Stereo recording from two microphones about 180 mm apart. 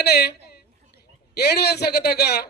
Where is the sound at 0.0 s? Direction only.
65° left (ahead or behind).